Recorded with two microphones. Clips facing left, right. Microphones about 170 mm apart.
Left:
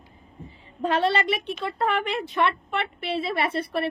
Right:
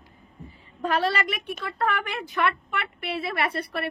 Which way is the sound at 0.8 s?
25° left (ahead or behind).